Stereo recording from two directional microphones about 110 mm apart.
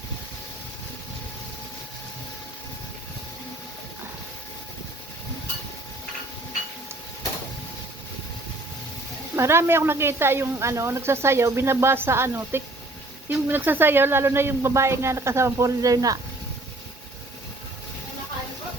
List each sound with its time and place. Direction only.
9.3 s speech: 25° right (ahead or behind)